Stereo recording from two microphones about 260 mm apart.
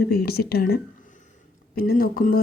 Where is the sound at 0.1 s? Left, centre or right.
Left.